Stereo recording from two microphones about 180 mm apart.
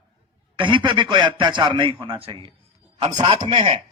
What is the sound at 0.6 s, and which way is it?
A man's voice, 25° right (ahead or behind).